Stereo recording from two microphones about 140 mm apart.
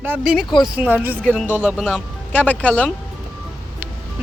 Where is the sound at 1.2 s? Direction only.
10° left (ahead or behind).